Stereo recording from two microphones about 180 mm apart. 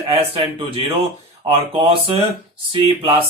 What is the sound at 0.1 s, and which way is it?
Speech, 30° right (ahead or behind).